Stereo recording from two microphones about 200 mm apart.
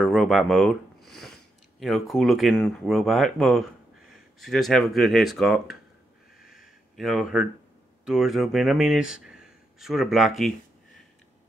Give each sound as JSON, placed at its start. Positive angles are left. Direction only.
{"t": 0.0, "sound": "speech", "side_deg": 0}
{"t": 6.4, "sound": "a sound", "side_deg": 0}
{"t": 8.0, "sound": "speech", "side_deg": -5}